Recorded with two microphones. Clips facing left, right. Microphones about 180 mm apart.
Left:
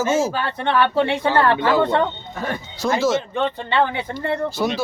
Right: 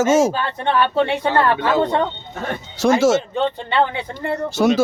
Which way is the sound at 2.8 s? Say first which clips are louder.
Right 5 dB; 80° right.